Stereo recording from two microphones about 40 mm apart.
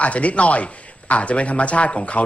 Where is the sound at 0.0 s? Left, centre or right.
Left.